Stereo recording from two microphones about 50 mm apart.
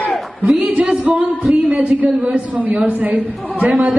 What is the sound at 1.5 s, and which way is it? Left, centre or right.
A man's voice, right.